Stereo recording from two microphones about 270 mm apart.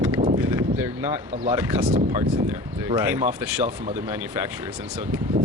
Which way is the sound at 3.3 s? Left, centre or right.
Centre.